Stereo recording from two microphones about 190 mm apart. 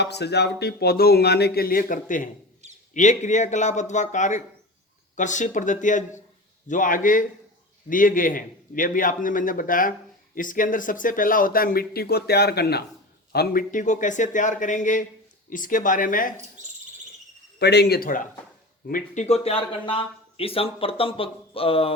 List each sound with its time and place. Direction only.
0.0 s a man's voice: 60° left (ahead or behind); by 16.3 s 45° left (ahead or behind)
17.6 s speech: 60° left (ahead or behind); by 21.9 s 30° left (ahead or behind)